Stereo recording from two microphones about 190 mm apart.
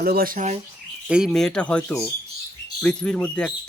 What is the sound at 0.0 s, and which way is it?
Speech, 50° right (ahead or behind).